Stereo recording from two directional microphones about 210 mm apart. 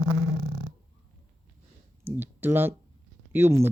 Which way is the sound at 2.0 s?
10° right (ahead or behind).